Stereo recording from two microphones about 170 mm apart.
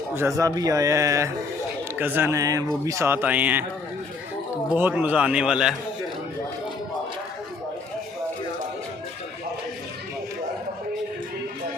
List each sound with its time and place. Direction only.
0.2 s a man's voice: 20° right (ahead or behind)
4.7 s speech: 10° right (ahead or behind)